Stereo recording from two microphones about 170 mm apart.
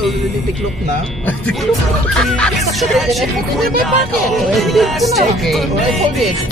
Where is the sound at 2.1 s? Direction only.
5° left (ahead or behind).